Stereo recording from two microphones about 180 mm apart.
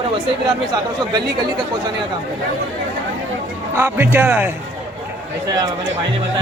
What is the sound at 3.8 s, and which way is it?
Speech, 10° right (ahead or behind).